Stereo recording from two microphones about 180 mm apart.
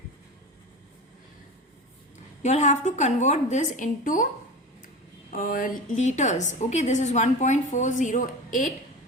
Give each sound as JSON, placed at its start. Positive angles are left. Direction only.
{"t": 2.4, "sound": "a woman's voice", "side_deg": 40}
{"t": 5.3, "sound": "a woman's voice", "side_deg": 50}